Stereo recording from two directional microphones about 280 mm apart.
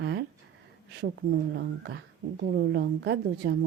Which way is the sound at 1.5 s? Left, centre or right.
Right.